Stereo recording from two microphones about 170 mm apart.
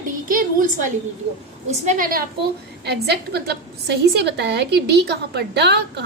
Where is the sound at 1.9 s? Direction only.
55° right (ahead or behind).